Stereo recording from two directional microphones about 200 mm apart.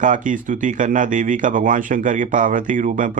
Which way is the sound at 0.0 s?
40° right (ahead or behind).